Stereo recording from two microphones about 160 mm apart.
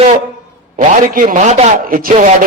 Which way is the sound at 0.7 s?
60° right (ahead or behind).